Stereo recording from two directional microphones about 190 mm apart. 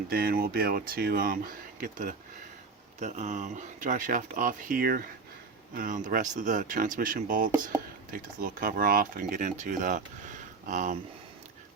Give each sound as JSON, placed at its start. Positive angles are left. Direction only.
{"t": 0.1, "sound": "speech", "side_deg": -50}